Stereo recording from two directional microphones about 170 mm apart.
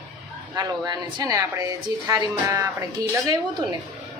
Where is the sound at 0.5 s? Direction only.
25° right (ahead or behind).